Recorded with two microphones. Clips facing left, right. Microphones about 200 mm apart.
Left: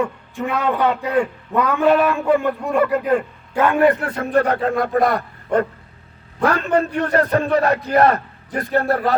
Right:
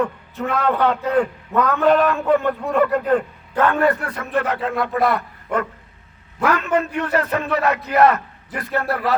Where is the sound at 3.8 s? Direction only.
20° left (ahead or behind).